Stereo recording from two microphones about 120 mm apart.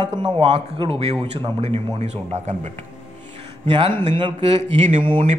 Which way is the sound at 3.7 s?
50° right (ahead or behind).